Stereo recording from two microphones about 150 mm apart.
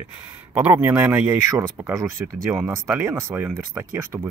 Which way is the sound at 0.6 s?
10° right (ahead or behind).